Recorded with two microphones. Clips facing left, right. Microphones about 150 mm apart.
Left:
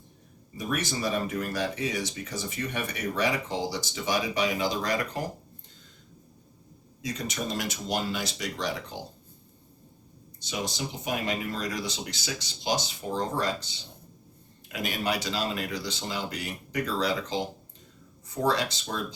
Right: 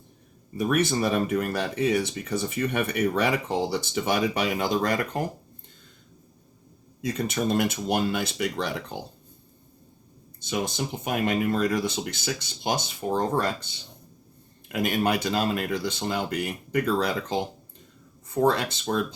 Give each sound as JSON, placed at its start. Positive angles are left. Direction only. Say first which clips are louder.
{"t": 0.5, "sound": "speech", "louder": "right 7 dB", "side_deg": -60}
{"t": 7.0, "sound": "speech", "louder": "right 6 dB", "side_deg": -55}
{"t": 10.4, "sound": "speech", "louder": "right 4 dB", "side_deg": -55}